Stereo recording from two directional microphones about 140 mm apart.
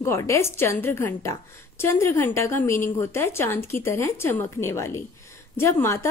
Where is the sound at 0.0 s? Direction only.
20° left (ahead or behind).